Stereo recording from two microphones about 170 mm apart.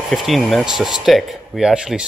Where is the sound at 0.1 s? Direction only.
Centre (ahead or behind).